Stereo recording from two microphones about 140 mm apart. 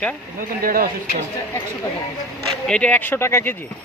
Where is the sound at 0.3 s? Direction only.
90° right.